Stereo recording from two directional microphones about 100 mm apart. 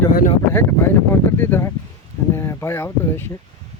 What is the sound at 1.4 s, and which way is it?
Speech, 20° left (ahead or behind).